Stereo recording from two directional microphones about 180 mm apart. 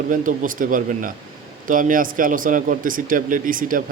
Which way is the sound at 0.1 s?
50° right (ahead or behind).